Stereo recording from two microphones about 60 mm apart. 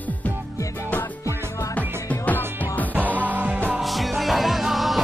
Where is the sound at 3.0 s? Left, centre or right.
Right.